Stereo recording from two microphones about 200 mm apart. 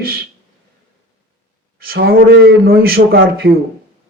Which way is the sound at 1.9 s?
50° right (ahead or behind).